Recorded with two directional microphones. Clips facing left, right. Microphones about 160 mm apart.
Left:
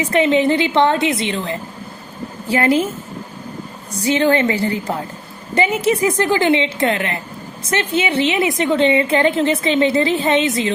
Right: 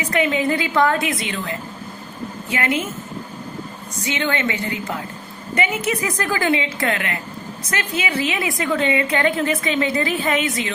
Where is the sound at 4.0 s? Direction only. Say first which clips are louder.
Left 8 dB; 35° left (ahead or behind).